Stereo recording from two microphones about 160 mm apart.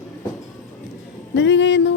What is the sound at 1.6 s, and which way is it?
Music, 90° left.